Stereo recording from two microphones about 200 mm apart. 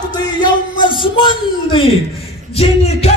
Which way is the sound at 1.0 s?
25° left (ahead or behind).